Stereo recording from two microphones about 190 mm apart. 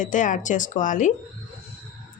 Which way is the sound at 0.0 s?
40° left (ahead or behind).